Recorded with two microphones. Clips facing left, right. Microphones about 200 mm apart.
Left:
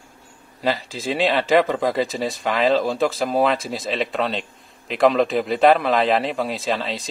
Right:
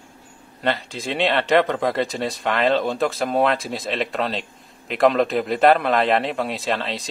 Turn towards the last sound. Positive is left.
turn(degrees=0)  # may be behind; listen again after turning